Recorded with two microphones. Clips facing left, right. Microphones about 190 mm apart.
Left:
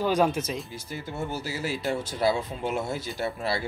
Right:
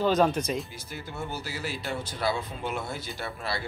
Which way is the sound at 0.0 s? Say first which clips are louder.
Even; 10° left (ahead or behind).